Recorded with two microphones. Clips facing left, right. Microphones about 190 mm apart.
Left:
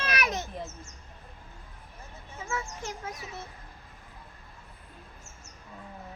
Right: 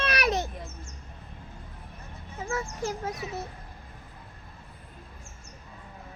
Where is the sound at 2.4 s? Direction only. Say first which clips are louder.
Right 5 dB; 40° right (ahead or behind).